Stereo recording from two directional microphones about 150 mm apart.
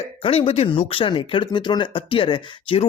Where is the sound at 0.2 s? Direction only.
40° left (ahead or behind).